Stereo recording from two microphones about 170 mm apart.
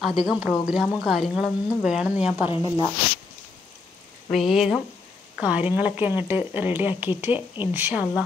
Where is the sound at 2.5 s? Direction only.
30° left (ahead or behind).